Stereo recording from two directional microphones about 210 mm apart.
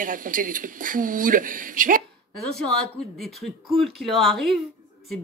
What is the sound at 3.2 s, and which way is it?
A woman's voice, centre (ahead or behind).